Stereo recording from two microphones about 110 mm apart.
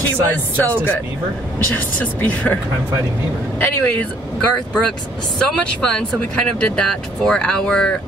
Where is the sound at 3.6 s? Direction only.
15° left (ahead or behind).